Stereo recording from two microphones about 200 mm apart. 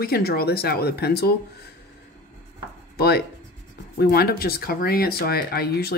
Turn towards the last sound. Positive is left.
turn(degrees=50)  # may be behind; listen again after turning